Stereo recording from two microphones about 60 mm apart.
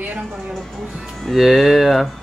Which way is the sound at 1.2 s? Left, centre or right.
Centre.